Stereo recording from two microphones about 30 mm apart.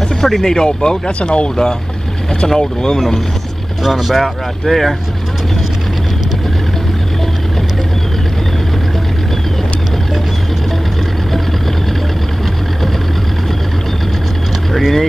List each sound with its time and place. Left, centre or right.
0.2 s speech: centre
0.6 s speech: left
2.4 s speech: centre
3.8 s speech: centre
14.7 s speech: centre